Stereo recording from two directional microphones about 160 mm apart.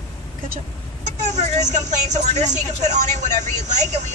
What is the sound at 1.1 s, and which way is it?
Speech, 45° right (ahead or behind).